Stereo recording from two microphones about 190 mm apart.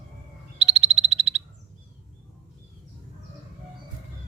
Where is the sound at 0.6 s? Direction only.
35° right (ahead or behind).